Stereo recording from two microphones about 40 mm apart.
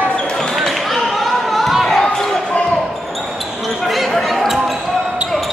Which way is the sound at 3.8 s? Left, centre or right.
Centre.